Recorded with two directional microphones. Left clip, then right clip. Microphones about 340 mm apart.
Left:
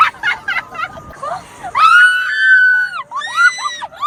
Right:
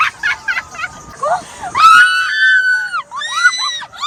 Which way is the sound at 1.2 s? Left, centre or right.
Centre.